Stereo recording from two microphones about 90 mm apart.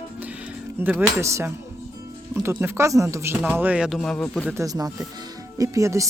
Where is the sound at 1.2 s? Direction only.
30° right (ahead or behind).